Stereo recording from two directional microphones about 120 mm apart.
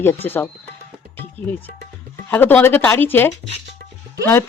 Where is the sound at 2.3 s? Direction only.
15° left (ahead or behind).